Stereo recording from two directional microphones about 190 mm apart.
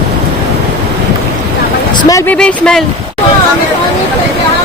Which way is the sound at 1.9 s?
15° left (ahead or behind).